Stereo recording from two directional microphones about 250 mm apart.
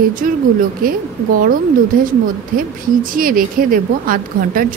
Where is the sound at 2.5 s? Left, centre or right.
Right.